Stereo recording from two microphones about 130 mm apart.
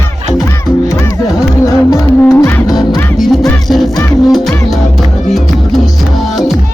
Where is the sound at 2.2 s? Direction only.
20° left (ahead or behind).